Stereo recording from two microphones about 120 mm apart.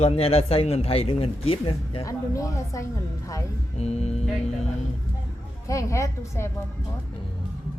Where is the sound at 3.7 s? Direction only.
60° left (ahead or behind).